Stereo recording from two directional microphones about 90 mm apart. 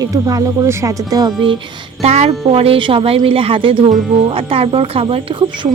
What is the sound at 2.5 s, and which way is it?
A woman's voice, 90° right.